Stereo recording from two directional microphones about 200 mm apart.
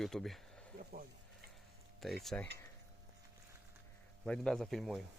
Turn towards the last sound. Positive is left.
turn(degrees=0)  # may be behind; listen again after turning